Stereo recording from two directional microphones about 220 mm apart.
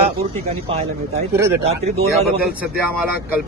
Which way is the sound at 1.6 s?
30° right (ahead or behind).